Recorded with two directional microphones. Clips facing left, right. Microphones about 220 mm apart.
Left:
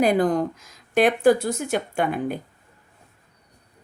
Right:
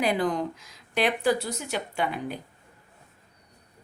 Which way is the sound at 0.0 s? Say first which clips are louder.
Left 6 dB; 45° left (ahead or behind).